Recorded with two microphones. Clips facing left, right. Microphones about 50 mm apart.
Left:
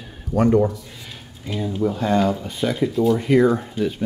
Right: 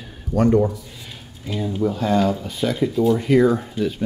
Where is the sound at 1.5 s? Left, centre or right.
Centre.